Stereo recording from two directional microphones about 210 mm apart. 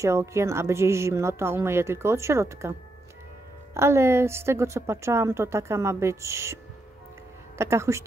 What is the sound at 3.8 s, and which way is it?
A woman's voice, 10° right (ahead or behind).